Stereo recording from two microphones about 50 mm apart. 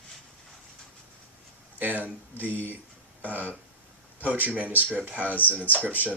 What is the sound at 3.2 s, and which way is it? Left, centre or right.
Speech, right.